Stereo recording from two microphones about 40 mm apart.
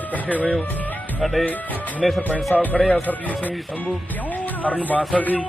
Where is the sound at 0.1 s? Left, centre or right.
Left.